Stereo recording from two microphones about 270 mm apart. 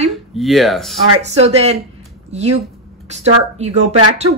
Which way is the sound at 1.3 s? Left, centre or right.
Right.